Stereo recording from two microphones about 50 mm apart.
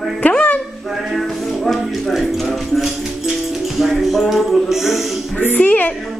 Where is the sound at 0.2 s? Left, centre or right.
Left.